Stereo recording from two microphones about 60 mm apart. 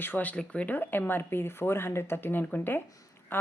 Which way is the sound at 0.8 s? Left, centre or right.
Left.